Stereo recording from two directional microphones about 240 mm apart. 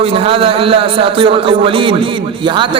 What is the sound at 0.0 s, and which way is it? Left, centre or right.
A man's voice, right.